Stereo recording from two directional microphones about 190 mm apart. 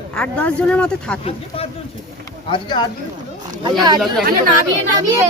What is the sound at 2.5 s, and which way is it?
Speech, 25° left (ahead or behind).